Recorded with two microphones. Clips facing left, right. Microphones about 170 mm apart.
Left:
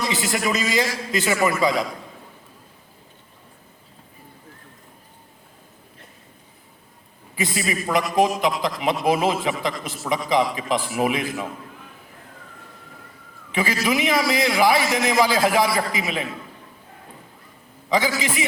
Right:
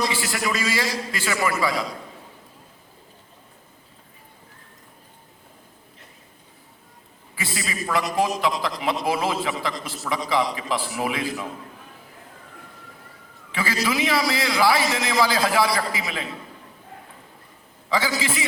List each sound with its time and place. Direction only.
0.1 s a man's voice: 20° left (ahead or behind)
7.3 s a man's voice: 20° left (ahead or behind)
13.5 s a man's voice: 20° left (ahead or behind)
17.8 s a man's voice: 20° left (ahead or behind)